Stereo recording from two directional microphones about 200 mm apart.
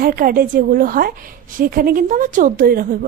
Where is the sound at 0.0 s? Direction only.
45° right (ahead or behind).